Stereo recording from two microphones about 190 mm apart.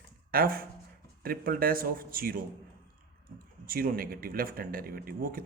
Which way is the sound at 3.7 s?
50° right (ahead or behind).